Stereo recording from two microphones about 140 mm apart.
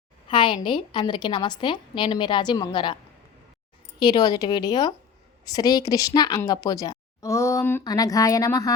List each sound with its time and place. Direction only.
0.3 s a woman's voice: 35° left (ahead or behind)
4.0 s speech: 30° left (ahead or behind)